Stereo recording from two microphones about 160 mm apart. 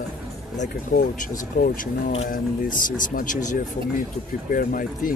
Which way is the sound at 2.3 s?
60° left (ahead or behind).